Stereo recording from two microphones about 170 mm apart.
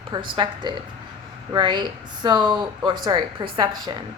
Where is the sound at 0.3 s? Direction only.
25° right (ahead or behind).